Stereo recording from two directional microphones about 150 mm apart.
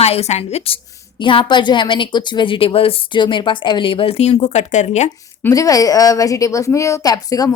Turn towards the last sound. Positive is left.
turn(degrees=25)  # may be behind; listen again after turning